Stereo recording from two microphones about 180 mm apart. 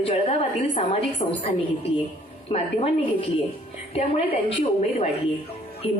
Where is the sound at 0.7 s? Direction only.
35° left (ahead or behind).